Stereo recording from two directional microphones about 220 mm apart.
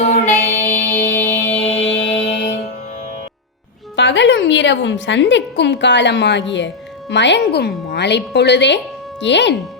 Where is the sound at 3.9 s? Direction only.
55° left (ahead or behind).